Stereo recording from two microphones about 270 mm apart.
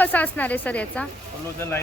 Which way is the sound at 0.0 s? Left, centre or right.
Centre.